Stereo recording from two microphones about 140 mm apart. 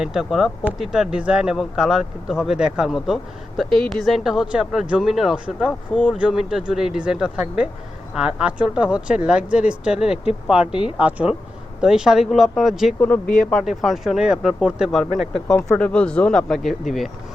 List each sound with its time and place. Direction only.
0.0 s speech: 5° right (ahead or behind)
13.2 s speech: 90° left
13.5 s speech: centre (ahead or behind)